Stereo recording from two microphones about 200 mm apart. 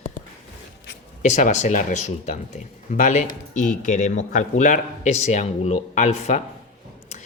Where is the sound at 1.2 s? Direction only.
35° left (ahead or behind).